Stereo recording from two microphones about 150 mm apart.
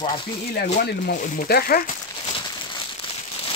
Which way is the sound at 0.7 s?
90° left.